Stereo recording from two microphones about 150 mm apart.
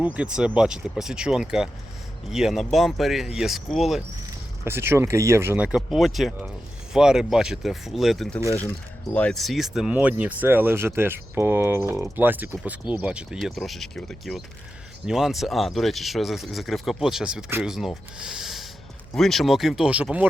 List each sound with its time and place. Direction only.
0.0 s speech: 10° right (ahead or behind)
4.6 s speech: 15° right (ahead or behind); by 8.4 s centre (ahead or behind)
8.4 s speech: 15° left (ahead or behind); by 20.2 s 10° right (ahead or behind)